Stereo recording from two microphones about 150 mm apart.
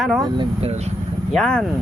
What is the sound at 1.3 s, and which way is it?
Speech, 5° left (ahead or behind).